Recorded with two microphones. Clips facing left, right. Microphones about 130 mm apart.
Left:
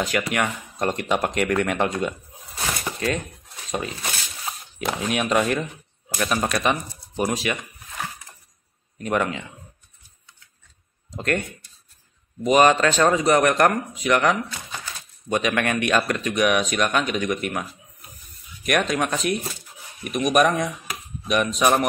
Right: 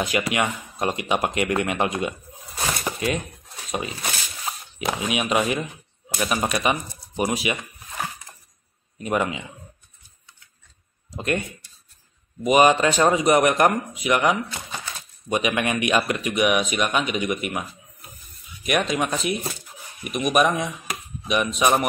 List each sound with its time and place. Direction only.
0.0 s speech: 10° right (ahead or behind)
2.8 s a sound: 10° right (ahead or behind)
3.7 s speech: 10° right (ahead or behind)
8.9 s speech: 10° right (ahead or behind)
11.1 s speech: 10° right (ahead or behind)
12.4 s speech: 10° right (ahead or behind)